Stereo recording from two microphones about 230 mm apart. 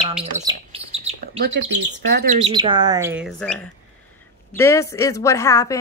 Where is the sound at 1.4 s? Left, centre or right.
Right.